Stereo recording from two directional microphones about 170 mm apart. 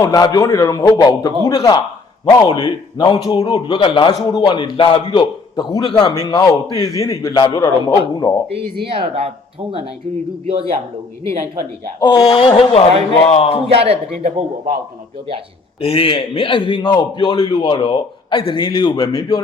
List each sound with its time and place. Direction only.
0.0 s a man's voice: 20° left (ahead or behind)
8.9 s a man's voice: 35° right (ahead or behind)
10.4 s a man's voice: 30° right (ahead or behind)
12.3 s speech: 30° left (ahead or behind)
13.7 s a man's voice: 35° right (ahead or behind)
15.8 s a man's voice: 35° left (ahead or behind)